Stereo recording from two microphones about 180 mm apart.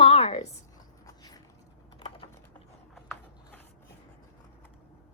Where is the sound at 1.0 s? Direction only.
20° left (ahead or behind).